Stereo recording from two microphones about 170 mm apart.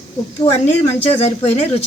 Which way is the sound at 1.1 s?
35° left (ahead or behind).